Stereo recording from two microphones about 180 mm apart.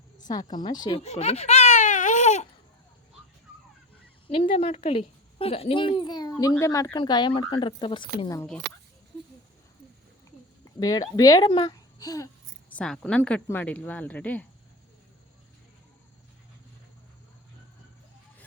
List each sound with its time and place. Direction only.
0.3 s baby cry: 20° left (ahead or behind); by 2.5 s 40° left (ahead or behind)
4.3 s speech: 35° left (ahead or behind)
10.8 s speech: 20° left (ahead or behind)
12.7 s speech: 5° left (ahead or behind)